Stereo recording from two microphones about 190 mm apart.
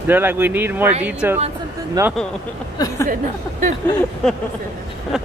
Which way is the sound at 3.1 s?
45° right (ahead or behind).